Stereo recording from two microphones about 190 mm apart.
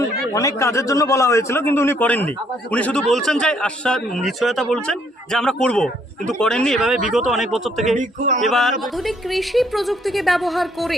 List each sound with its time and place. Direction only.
0.3 s a man's voice: 15° left (ahead or behind); by 7.9 s centre (ahead or behind)
7.9 s speech: 40° right (ahead or behind)
8.4 s a man's voice: centre (ahead or behind)